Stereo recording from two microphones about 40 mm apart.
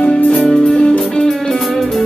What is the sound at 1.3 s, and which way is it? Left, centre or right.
Music, centre.